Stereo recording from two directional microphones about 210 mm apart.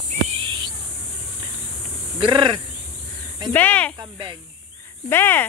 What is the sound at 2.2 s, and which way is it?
Speech, 20° right (ahead or behind).